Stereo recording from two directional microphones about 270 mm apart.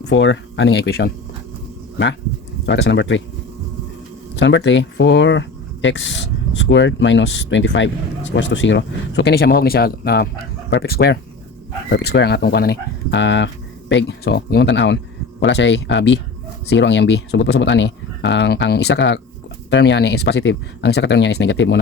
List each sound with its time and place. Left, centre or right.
0.0 s speech: left
2.6 s speech: left
4.4 s speech: left